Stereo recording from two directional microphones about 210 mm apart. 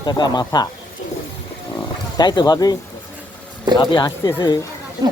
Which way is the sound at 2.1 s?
20° left (ahead or behind).